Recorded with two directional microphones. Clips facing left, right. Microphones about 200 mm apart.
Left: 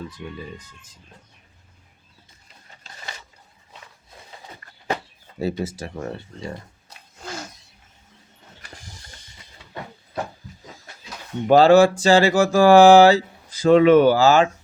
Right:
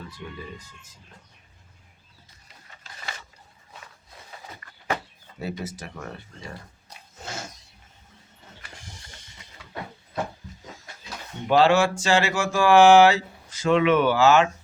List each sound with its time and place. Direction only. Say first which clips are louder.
0.2 s speech: left 1 dB; 20° left (ahead or behind)
4.6 s a sound: even; 35° left (ahead or behind)
5.4 s speech: left 7 dB; 30° left (ahead or behind)
11.4 s speech: left 6 dB; 40° left (ahead or behind)